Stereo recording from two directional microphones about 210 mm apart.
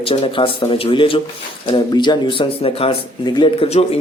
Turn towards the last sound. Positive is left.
turn(degrees=25)  # may be behind; listen again after turning